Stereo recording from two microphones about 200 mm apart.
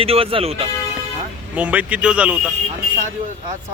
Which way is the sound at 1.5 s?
5° right (ahead or behind).